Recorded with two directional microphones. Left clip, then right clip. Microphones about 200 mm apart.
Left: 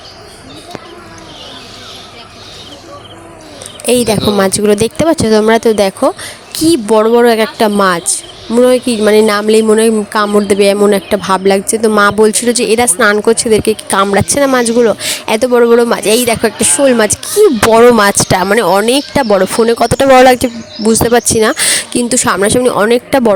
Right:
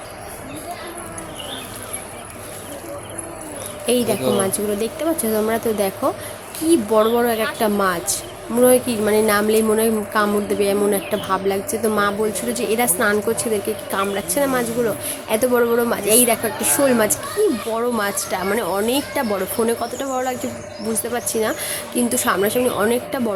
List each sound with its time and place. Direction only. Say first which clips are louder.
3.8 s speech: left 8 dB; 50° left (ahead or behind)
17.7 s speech: left 16 dB; 55° left (ahead or behind)